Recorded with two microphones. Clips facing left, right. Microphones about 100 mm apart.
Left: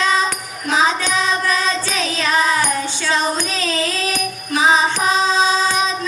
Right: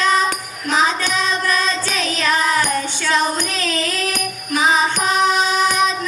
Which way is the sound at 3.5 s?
20° left (ahead or behind).